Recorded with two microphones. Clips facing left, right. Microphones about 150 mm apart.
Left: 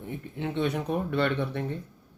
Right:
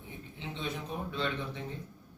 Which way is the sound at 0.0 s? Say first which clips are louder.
Left 10 dB; 60° left (ahead or behind).